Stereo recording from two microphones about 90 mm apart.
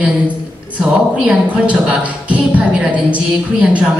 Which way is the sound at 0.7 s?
15° right (ahead or behind).